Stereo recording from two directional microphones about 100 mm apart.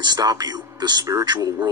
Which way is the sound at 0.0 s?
40° right (ahead or behind).